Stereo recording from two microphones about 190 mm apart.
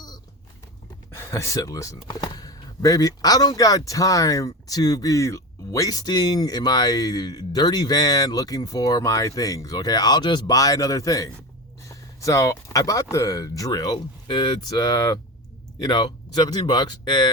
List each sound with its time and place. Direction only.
1.1 s speech: 15° left (ahead or behind)